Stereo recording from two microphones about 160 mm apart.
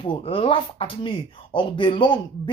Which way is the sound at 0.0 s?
35° left (ahead or behind).